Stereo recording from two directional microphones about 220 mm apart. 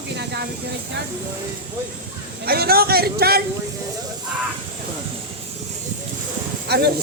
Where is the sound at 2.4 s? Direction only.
45° right (ahead or behind).